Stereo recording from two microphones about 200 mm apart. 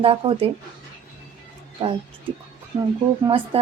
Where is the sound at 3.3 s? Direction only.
25° right (ahead or behind).